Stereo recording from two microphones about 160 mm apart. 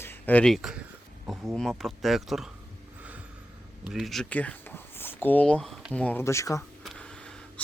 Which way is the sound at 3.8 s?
Centre (ahead or behind).